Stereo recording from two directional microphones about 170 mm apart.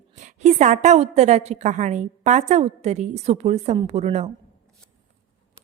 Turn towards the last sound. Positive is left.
turn(degrees=-40)  # may be behind; listen again after turning